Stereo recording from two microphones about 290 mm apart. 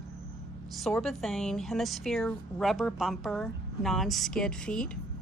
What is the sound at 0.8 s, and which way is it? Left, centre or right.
A woman's voice, centre.